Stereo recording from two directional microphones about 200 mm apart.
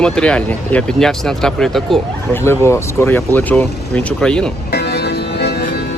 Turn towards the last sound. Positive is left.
turn(degrees=50)  # may be behind; listen again after turning